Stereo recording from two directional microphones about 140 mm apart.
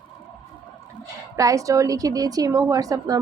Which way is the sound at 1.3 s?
25° right (ahead or behind).